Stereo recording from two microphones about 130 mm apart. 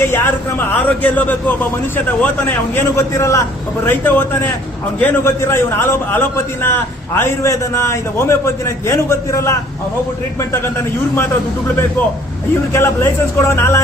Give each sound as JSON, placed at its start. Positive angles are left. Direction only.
{"t": 0.9, "sound": "a man's voice", "side_deg": 15}
{"t": 2.7, "sound": "a man's voice", "side_deg": 20}
{"t": 12.7, "sound": "a man's voice", "side_deg": 20}